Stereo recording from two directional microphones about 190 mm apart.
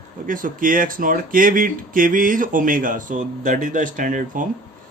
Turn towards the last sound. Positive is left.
turn(degrees=-45)  # may be behind; listen again after turning